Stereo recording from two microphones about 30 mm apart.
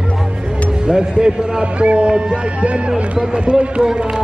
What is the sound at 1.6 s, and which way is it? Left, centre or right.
Speech, right.